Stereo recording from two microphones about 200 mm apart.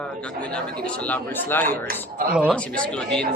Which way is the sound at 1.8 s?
45° right (ahead or behind).